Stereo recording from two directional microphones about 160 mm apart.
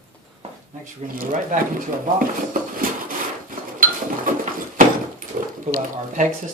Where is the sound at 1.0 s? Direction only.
60° right (ahead or behind).